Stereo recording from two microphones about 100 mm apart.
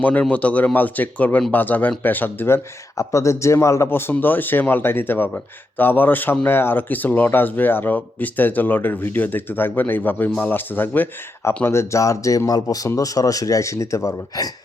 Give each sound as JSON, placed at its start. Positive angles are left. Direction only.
{"t": 0.0, "sound": "speech", "side_deg": 15}
{"t": 3.0, "sound": "speech", "side_deg": 30}